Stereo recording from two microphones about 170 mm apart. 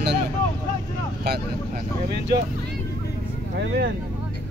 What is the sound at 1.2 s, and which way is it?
Speech, 70° right (ahead or behind).